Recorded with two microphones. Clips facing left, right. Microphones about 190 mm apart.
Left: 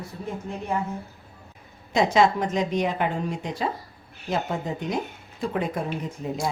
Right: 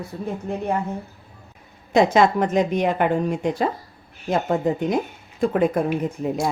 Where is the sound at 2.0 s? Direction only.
55° right (ahead or behind).